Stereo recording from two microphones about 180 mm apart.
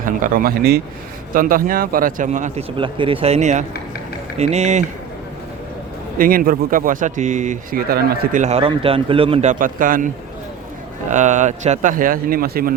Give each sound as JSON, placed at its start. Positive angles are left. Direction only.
{"t": 0.0, "sound": "speech", "side_deg": -50}
{"t": 2.7, "sound": "speech", "side_deg": -30}
{"t": 6.1, "sound": "speech", "side_deg": -55}
{"t": 11.1, "sound": "speech", "side_deg": -40}